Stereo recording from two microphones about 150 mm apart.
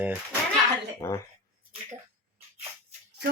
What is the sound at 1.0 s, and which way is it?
Speech, 20° left (ahead or behind).